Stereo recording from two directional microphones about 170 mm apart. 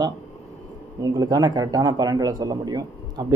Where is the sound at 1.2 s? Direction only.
20° right (ahead or behind).